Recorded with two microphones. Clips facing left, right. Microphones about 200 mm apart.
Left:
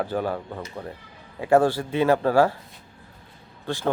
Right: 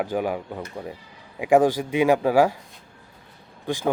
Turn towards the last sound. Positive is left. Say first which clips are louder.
# right 1 dB
turn(degrees=-15)  # may be behind; listen again after turning